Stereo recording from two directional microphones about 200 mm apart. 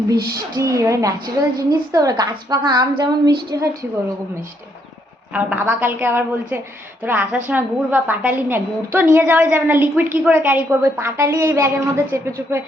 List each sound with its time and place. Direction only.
0.1 s a woman's voice: 20° right (ahead or behind)
3.0 s a sound: 20° right (ahead or behind)
5.3 s a woman's voice: 10° right (ahead or behind)